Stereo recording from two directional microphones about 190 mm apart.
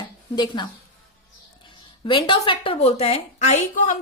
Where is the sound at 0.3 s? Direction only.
25° left (ahead or behind).